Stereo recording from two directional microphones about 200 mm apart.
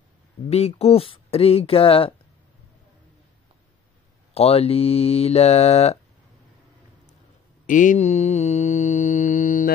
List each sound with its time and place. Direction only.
0.5 s speech: 30° left (ahead or behind)
4.3 s speech: 30° left (ahead or behind)
7.6 s mantra: 40° left (ahead or behind)